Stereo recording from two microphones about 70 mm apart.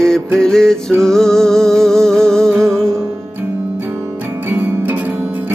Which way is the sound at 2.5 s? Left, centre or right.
Right.